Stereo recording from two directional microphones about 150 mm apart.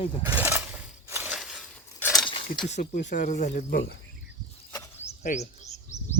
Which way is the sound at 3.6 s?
90° left.